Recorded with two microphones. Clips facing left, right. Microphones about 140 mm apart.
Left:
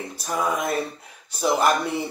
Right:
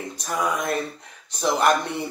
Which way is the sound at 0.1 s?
5° left (ahead or behind).